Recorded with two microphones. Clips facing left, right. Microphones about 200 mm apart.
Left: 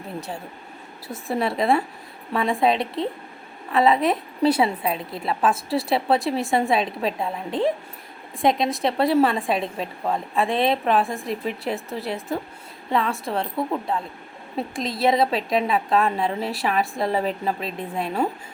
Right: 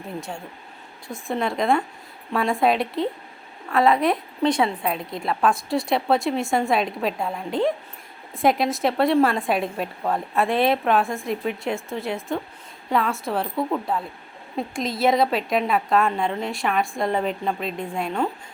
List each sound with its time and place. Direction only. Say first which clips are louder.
0.2 s a woman's voice: left 1 dB; 5° left (ahead or behind)